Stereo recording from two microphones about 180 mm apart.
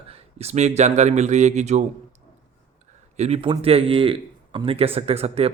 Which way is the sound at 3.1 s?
35° right (ahead or behind).